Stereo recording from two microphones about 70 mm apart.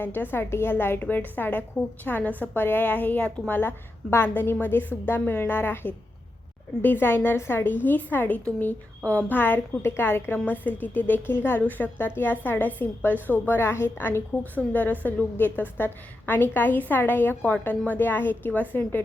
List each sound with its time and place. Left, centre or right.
0.0 s a woman's voice: left